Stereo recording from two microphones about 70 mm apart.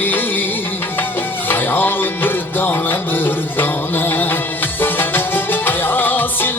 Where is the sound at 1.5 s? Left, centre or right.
Left.